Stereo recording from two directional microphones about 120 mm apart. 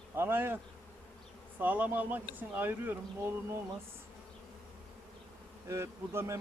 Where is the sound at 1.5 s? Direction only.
15° right (ahead or behind).